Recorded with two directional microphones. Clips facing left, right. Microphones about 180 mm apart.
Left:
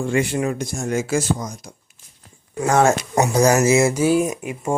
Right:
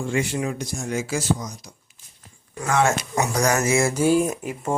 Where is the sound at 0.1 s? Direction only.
55° left (ahead or behind).